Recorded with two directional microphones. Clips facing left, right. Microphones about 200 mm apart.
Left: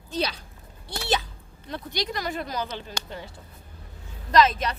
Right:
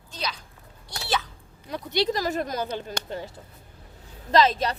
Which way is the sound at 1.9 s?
30° right (ahead or behind).